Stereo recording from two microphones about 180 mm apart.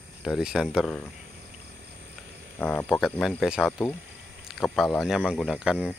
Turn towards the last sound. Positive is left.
turn(degrees=-5)  # may be behind; listen again after turning